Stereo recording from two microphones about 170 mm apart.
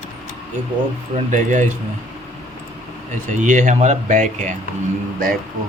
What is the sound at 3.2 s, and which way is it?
Speech, 50° right (ahead or behind).